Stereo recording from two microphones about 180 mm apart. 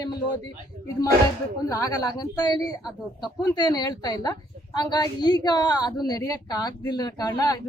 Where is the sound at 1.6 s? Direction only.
20° left (ahead or behind).